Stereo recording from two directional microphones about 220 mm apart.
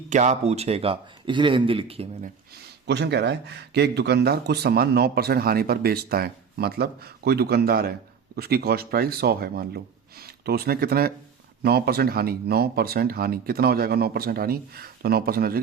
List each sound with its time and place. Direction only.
0.1 s speech: 30° right (ahead or behind)
2.6 s speech: 50° right (ahead or behind)